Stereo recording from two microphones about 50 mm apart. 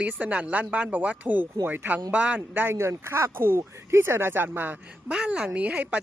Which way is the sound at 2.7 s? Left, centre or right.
Right.